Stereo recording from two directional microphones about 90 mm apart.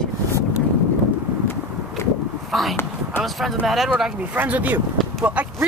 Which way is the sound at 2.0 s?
30° left (ahead or behind).